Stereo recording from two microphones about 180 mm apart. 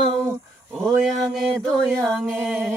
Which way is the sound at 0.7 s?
Centre (ahead or behind).